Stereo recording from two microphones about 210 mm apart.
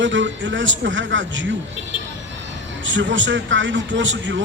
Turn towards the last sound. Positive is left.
turn(degrees=-60)  # may be behind; listen again after turning